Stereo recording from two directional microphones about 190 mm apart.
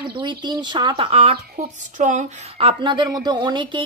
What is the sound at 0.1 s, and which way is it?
Speech, 25° right (ahead or behind).